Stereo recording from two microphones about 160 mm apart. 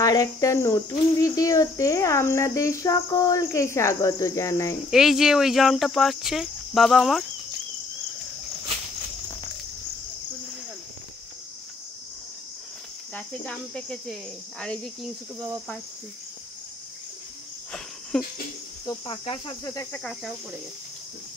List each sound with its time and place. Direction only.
0.0 s cricket: 20° left (ahead or behind)
4.9 s cricket: 5° right (ahead or behind)
13.1 s cricket: 5° left (ahead or behind)
18.1 s cricket: 5° left (ahead or behind)
19.0 s cricket: 30° left (ahead or behind)
19.9 s cricket: 5° left (ahead or behind)